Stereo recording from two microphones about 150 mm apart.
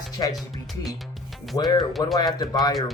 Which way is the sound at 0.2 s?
25° left (ahead or behind).